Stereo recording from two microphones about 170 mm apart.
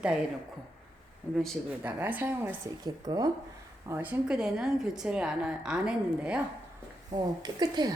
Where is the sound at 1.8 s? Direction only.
10° right (ahead or behind).